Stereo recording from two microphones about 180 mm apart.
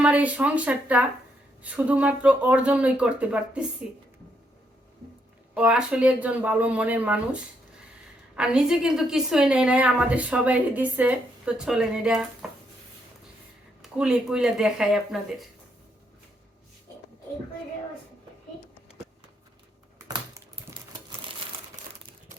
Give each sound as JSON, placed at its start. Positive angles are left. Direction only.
{"t": 0.0, "sound": "speech", "side_deg": -5}
{"t": 5.5, "sound": "speech", "side_deg": -5}
{"t": 8.4, "sound": "a woman's voice", "side_deg": -5}
{"t": 13.8, "sound": "a woman's voice", "side_deg": -5}
{"t": 20.1, "sound": "typing", "side_deg": -15}